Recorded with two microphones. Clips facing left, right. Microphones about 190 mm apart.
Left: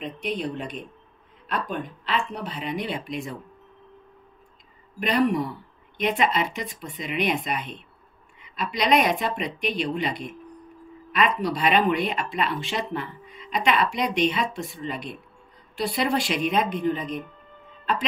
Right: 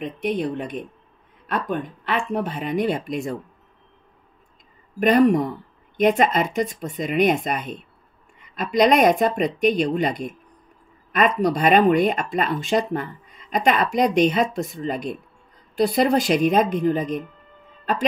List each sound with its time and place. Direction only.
0.0 s speech: 55° right (ahead or behind)
5.0 s speech: 45° right (ahead or behind)